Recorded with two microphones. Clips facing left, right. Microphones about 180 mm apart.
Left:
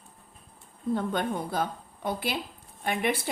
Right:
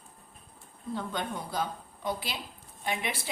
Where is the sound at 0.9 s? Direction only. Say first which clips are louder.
Left 6 dB; 55° left (ahead or behind).